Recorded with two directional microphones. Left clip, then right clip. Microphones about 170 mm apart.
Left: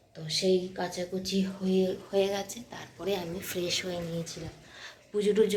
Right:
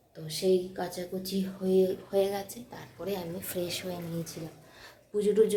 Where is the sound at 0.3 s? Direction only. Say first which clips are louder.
Even; 5° right (ahead or behind).